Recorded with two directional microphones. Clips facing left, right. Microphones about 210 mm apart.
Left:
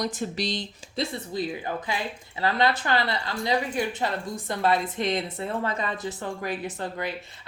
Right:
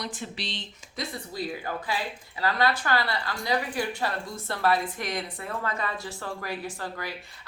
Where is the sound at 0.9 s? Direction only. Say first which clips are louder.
Left 5 dB; 20° left (ahead or behind).